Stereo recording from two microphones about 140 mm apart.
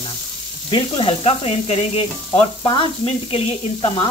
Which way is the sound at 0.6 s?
35° left (ahead or behind).